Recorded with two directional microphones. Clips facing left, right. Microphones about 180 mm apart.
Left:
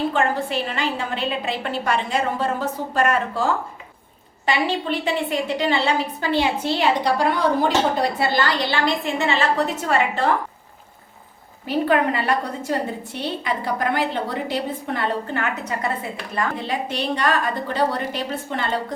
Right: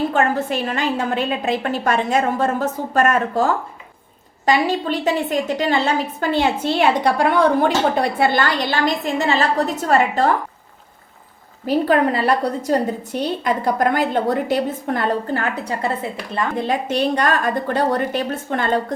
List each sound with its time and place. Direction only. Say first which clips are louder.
0.1 s a woman's voice: right 3 dB; 45° right (ahead or behind)
11.6 s a woman's voice: right 3 dB; 40° right (ahead or behind)
16.6 s a woman's voice: right 6 dB; 45° right (ahead or behind)